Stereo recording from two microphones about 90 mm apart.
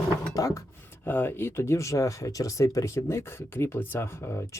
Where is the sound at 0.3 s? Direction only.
35° left (ahead or behind).